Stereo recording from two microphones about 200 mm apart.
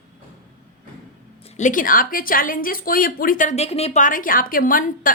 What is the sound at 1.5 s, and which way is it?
A woman's voice, 40° left (ahead or behind).